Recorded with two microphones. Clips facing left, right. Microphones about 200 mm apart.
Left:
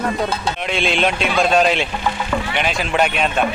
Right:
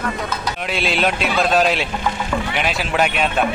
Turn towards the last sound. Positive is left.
turn(degrees=0)  # may be behind; listen again after turning